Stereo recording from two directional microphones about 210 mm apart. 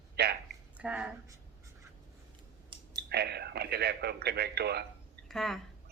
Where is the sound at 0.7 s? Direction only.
5° right (ahead or behind).